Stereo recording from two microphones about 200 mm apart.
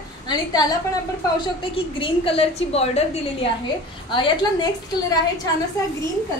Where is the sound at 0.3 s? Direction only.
20° left (ahead or behind).